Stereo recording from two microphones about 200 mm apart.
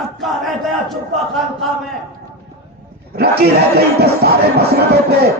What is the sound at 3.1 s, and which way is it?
A man's voice, 50° right (ahead or behind).